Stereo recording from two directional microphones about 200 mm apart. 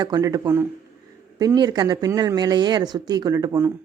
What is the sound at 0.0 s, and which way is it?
Speech, 20° right (ahead or behind).